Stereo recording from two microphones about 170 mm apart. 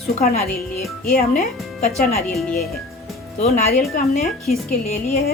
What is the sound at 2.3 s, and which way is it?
Speech, centre (ahead or behind).